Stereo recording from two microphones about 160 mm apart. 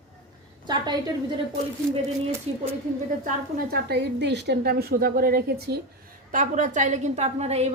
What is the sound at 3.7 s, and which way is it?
A woman's voice, 90° right.